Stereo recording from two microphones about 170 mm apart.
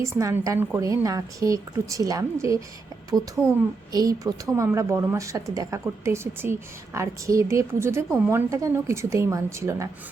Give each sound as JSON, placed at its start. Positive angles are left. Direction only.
{"t": 0.0, "sound": "a woman's voice", "side_deg": -20}
{"t": 3.9, "sound": "a woman's voice", "side_deg": -20}